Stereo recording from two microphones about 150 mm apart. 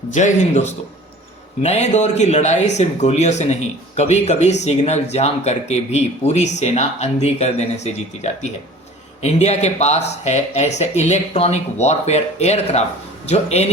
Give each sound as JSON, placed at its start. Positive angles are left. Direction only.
{"t": 0.1, "sound": "speech", "side_deg": 50}